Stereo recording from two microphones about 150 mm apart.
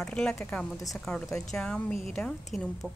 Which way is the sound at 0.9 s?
5° left (ahead or behind).